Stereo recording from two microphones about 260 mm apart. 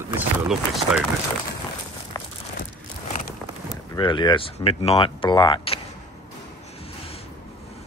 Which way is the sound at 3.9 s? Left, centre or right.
Centre.